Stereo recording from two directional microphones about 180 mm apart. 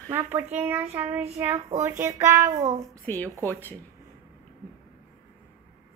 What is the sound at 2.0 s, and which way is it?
Speech, 15° right (ahead or behind).